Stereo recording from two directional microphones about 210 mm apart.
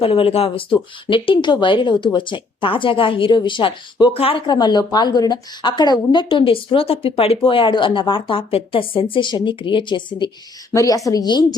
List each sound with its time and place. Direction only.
0.0 s a woman's voice: 25° left (ahead or behind)